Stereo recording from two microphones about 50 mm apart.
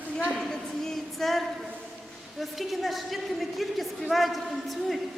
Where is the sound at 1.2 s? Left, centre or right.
Centre.